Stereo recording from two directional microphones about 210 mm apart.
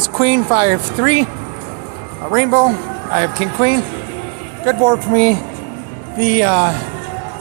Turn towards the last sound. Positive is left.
turn(degrees=-15)  # may be behind; listen again after turning